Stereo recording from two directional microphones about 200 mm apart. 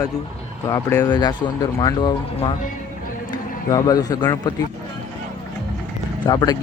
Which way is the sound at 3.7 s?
20° left (ahead or behind).